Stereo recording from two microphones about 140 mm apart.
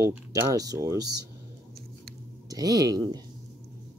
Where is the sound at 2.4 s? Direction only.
25° right (ahead or behind).